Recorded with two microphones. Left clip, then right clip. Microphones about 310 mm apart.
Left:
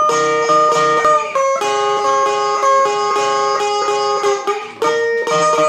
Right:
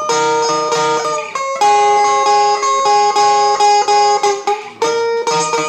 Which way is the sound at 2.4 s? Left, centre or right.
Centre.